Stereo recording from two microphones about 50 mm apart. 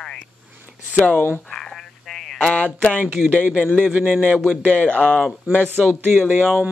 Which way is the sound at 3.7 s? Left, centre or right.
Right.